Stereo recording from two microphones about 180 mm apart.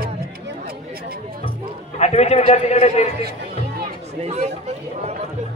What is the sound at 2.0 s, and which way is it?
A man's voice, 35° left (ahead or behind).